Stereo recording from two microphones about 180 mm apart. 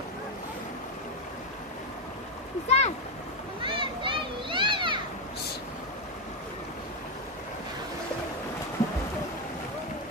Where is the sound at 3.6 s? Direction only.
30° right (ahead or behind).